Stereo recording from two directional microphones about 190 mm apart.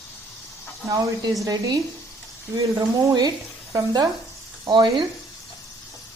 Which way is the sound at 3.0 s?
15° right (ahead or behind).